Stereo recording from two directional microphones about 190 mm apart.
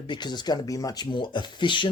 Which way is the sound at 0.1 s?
25° left (ahead or behind).